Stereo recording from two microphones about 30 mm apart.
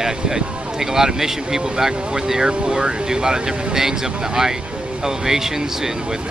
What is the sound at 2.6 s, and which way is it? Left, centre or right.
Speech, right.